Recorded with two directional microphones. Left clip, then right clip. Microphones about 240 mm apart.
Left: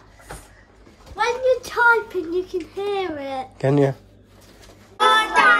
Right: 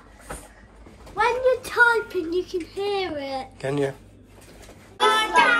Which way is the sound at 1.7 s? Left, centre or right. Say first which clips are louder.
Left 2 dB; centre.